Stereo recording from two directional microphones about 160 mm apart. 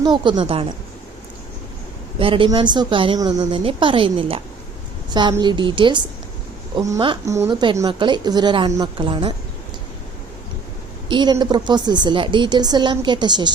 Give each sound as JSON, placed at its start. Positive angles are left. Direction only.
{"t": 0.0, "sound": "a woman's voice", "side_deg": -30}
{"t": 2.1, "sound": "speech", "side_deg": -35}
{"t": 5.4, "sound": "a woman's voice", "side_deg": -30}
{"t": 7.3, "sound": "a woman's voice", "side_deg": -20}
{"t": 11.1, "sound": "a woman's voice", "side_deg": -30}